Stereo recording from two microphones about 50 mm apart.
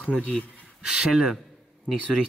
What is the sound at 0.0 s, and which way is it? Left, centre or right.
Speech, left.